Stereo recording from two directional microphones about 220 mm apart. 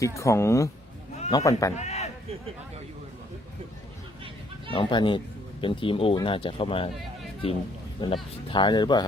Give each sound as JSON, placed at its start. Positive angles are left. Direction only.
{"t": 0.0, "sound": "speech", "side_deg": 15}
{"t": 1.7, "sound": "a sound", "side_deg": 30}
{"t": 4.7, "sound": "speech", "side_deg": 20}
{"t": 8.0, "sound": "speech", "side_deg": 20}